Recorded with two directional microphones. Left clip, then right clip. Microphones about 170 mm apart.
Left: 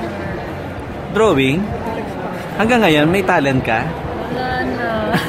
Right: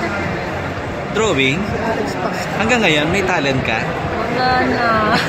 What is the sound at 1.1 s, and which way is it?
Speech, 45° left (ahead or behind).